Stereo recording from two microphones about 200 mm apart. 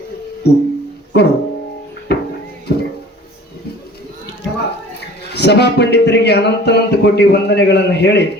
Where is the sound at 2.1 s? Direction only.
55° left (ahead or behind).